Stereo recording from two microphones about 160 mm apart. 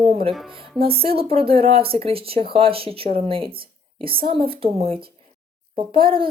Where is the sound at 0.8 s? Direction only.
35° right (ahead or behind).